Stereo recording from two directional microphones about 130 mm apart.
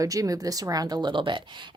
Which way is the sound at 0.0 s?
25° right (ahead or behind).